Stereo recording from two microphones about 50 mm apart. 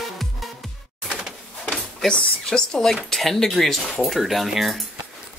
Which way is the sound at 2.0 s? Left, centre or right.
Centre.